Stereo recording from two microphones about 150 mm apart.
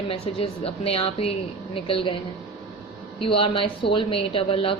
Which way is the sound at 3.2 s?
35° left (ahead or behind).